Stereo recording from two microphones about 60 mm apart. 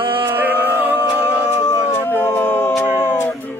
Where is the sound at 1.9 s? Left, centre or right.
Left.